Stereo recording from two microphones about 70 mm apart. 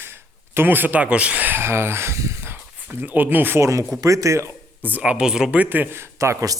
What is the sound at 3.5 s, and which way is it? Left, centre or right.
Speech, right.